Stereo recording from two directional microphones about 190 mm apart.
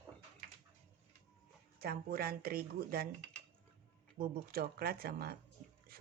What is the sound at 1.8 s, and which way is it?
Speech, 50° right (ahead or behind).